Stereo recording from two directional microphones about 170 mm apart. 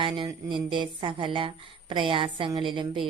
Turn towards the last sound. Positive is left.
turn(degrees=-30)  # may be behind; listen again after turning